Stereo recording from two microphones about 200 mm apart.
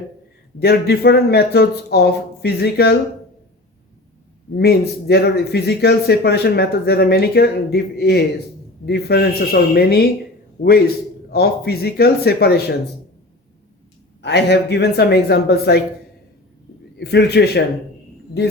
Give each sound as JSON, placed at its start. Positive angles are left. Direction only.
{"t": 0.6, "sound": "speech", "side_deg": 50}
{"t": 4.5, "sound": "speech", "side_deg": 55}
{"t": 14.2, "sound": "speech", "side_deg": 60}
{"t": 17.0, "sound": "speech", "side_deg": 55}